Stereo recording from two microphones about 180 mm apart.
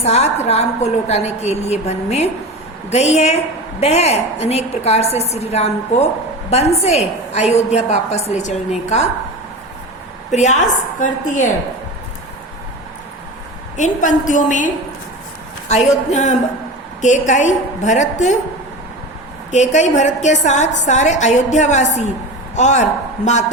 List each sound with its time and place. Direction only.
0.0 s a woman's voice: 35° left (ahead or behind)
10.3 s a woman's voice: 40° left (ahead or behind)
13.7 s a woman's voice: 45° left (ahead or behind)
15.7 s a woman's voice: 40° left (ahead or behind)
19.5 s a woman's voice: 40° left (ahead or behind)